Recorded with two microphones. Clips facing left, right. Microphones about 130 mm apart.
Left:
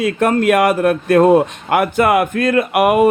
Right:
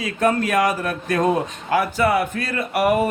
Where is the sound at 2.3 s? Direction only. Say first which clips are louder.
Left 11 dB; 50° left (ahead or behind).